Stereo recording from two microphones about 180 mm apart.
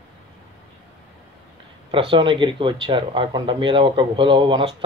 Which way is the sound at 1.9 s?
30° right (ahead or behind).